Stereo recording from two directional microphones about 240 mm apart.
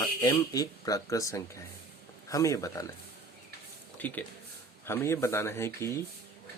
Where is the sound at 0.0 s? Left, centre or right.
Centre.